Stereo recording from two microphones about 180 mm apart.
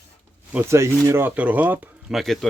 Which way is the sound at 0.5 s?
15° right (ahead or behind).